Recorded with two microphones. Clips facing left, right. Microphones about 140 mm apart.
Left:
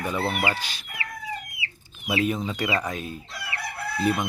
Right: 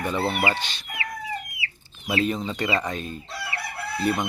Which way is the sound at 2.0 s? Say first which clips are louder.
Even; 10° left (ahead or behind).